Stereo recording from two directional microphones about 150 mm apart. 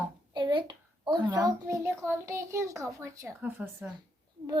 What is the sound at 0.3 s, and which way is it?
A child's voice, 30° right (ahead or behind).